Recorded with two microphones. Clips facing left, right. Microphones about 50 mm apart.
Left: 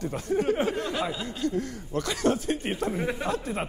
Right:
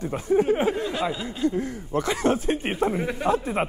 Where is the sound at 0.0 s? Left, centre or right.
Centre.